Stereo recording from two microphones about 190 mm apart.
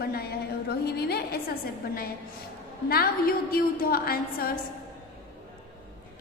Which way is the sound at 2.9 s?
55° left (ahead or behind).